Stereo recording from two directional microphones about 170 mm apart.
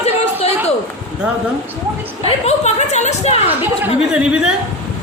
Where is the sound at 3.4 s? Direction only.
10° right (ahead or behind).